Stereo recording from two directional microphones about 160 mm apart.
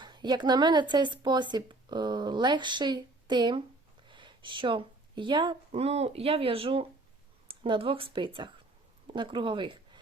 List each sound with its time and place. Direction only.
0.0 s speech: 30° right (ahead or behind)